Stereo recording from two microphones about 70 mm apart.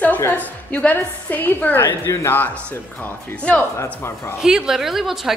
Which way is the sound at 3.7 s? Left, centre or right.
Left.